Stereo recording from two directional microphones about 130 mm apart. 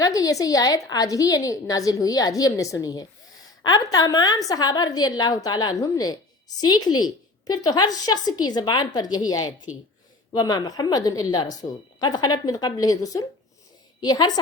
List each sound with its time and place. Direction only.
0.0 s a woman's voice: 25° left (ahead or behind)